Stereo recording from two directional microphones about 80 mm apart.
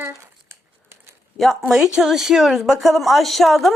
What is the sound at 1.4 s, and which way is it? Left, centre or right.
A woman's voice, centre.